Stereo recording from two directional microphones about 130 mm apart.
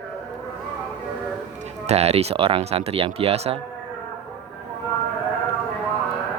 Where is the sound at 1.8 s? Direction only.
55° right (ahead or behind).